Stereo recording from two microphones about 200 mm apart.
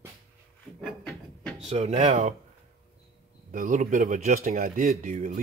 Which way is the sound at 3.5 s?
40° right (ahead or behind).